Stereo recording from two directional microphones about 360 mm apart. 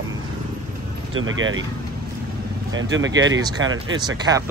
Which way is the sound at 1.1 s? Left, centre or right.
Right.